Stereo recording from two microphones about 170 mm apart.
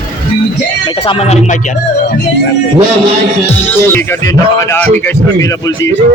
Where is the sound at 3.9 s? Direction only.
15° left (ahead or behind).